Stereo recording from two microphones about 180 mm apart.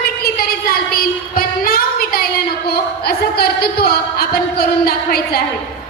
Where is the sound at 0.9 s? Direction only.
55° left (ahead or behind).